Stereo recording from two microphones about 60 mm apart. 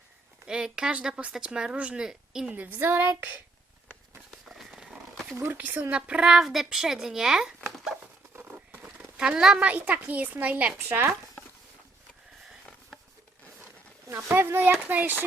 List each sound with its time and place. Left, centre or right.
0.4 s speech: centre
2.0 s speech: centre
2.6 s speech: right
4.7 s wild animals: centre
5.5 s a woman's voice: right
6.1 s speech: centre
8.4 s patter: right
8.8 s a sound: centre
9.6 s a woman's voice: right
14.3 s speech: right